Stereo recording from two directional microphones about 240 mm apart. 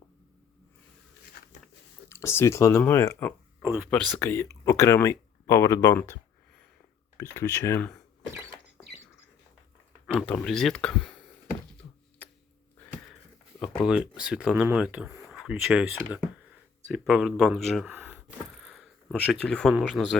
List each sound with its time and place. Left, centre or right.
1.4 s a sound: left
2.0 s speech: centre
3.6 s speech: centre
3.8 s speech: centre
7.2 s speech: centre
10.1 s speech: centre
13.6 s speech: centre